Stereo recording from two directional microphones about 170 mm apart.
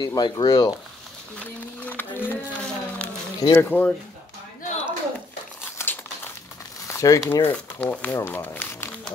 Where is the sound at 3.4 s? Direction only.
10° left (ahead or behind).